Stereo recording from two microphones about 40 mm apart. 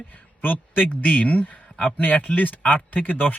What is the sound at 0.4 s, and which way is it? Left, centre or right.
A man's voice, left.